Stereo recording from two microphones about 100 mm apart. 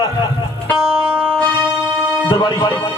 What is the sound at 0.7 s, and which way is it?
Music, 5° right (ahead or behind).